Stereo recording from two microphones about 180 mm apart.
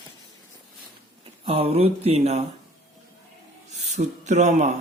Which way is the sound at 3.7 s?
40° right (ahead or behind).